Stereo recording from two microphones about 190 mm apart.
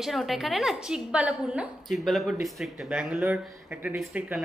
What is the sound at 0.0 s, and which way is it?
A woman's voice, centre (ahead or behind).